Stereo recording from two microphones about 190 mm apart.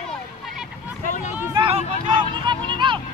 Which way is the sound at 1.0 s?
40° left (ahead or behind).